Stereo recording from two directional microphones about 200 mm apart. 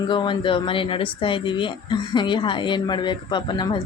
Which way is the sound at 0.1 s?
25° left (ahead or behind).